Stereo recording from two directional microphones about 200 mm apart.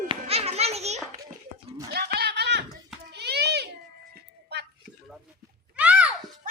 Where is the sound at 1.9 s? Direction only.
50° right (ahead or behind).